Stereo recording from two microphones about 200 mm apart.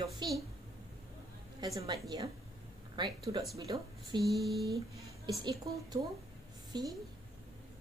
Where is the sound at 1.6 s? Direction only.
20° right (ahead or behind).